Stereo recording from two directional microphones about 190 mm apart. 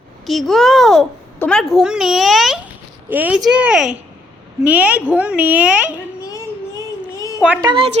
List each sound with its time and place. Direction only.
0.3 s a child's voice: centre (ahead or behind)
7.2 s a sound: 15° left (ahead or behind)
7.6 s a woman's voice: 25° right (ahead or behind)